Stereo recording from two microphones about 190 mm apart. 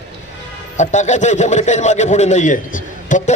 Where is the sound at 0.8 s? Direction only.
40° left (ahead or behind).